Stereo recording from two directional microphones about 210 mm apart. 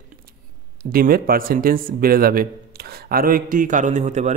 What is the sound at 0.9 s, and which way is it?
A man's voice, 45° right (ahead or behind).